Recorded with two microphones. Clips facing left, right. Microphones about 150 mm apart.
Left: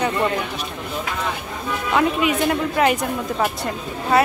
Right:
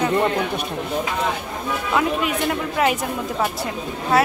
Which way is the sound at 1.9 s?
Centre (ahead or behind).